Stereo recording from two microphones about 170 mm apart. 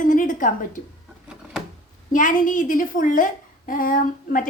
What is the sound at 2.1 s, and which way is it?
A woman's voice, 50° left (ahead or behind).